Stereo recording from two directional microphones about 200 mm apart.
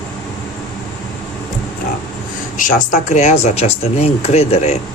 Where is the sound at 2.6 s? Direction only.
40° left (ahead or behind).